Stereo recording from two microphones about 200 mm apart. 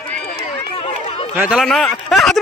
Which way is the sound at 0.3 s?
25° left (ahead or behind).